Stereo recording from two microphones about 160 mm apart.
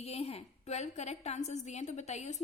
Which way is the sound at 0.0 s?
40° left (ahead or behind).